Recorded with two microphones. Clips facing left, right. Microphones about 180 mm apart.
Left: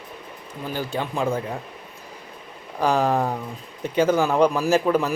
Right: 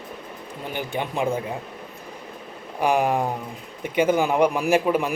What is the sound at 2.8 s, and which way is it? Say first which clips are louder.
Speech: even; 15° right (ahead or behind).